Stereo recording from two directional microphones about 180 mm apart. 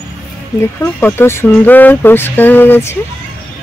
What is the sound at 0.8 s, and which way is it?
Speech, 10° left (ahead or behind).